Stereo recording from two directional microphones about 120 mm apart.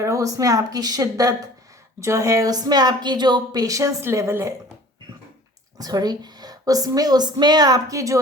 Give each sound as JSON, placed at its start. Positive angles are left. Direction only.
{"t": 0.0, "sound": "speech", "side_deg": -25}
{"t": 5.7, "sound": "a woman's voice", "side_deg": -30}